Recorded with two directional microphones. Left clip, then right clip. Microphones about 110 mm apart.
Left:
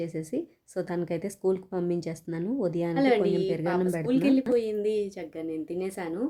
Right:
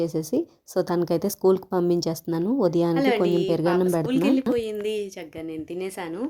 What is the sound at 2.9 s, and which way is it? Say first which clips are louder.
Speech: right 2 dB; 10° left (ahead or behind).